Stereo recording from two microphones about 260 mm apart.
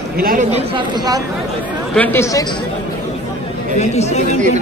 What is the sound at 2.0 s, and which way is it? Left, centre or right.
Speech, centre.